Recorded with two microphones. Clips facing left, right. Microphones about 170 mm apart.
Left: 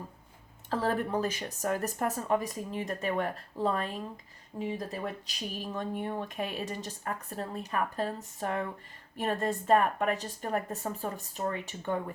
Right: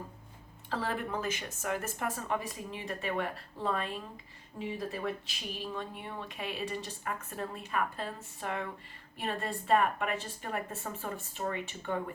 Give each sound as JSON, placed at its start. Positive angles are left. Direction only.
{"t": 0.7, "sound": "speech", "side_deg": 40}